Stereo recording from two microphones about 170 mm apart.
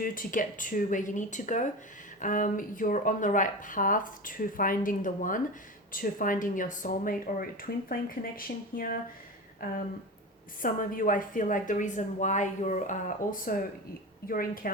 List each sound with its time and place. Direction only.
0.0 s speech: 55° left (ahead or behind)